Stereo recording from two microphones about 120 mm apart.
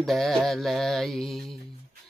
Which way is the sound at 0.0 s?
Centre (ahead or behind).